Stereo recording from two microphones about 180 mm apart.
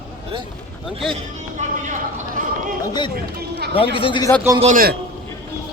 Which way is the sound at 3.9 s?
30° left (ahead or behind).